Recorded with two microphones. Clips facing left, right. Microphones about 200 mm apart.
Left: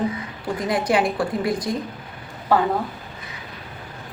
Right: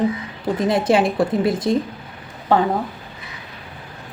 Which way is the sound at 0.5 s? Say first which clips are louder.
Right 4 dB; 25° right (ahead or behind).